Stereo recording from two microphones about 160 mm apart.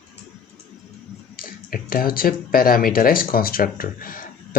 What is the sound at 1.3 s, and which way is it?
Speech, 65° left (ahead or behind).